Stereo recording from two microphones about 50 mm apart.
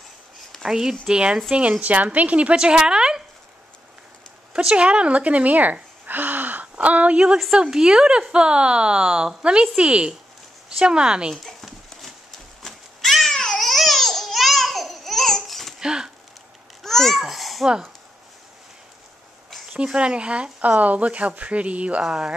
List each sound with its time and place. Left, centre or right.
0.7 s a woman's voice: centre
4.6 s a woman's voice: right
12.6 s cat: centre
13.6 s babbling: centre
15.8 s a sound: centre
16.8 s babbling: centre
17.2 s a sound: centre
19.8 s a woman's voice: centre
22.0 s a woman's voice: centre